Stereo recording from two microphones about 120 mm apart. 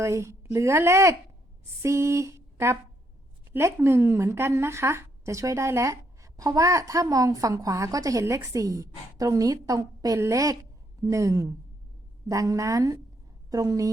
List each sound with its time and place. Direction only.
0.0 s a woman's voice: 25° right (ahead or behind)